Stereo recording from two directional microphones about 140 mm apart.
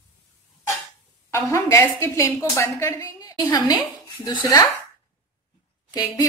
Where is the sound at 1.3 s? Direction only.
20° left (ahead or behind).